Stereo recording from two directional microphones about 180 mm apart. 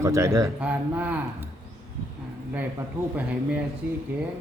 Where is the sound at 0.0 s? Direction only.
15° right (ahead or behind).